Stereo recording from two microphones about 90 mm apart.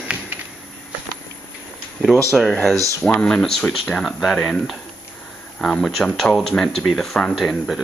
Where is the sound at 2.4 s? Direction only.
5° left (ahead or behind).